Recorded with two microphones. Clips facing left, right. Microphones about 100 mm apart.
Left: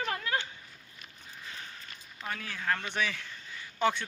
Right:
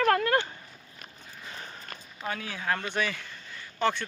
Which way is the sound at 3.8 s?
15° left (ahead or behind).